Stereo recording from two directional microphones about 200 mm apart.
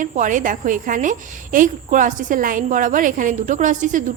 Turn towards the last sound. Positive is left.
turn(degrees=-40)  # may be behind; listen again after turning